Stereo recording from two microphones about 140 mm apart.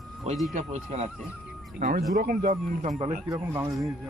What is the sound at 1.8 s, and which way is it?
Speech, 90° right.